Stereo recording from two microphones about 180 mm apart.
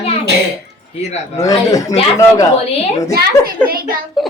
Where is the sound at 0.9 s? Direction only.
40° left (ahead or behind).